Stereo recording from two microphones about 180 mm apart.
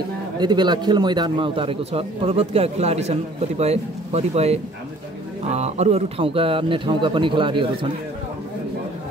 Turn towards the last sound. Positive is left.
turn(degrees=-25)  # may be behind; listen again after turning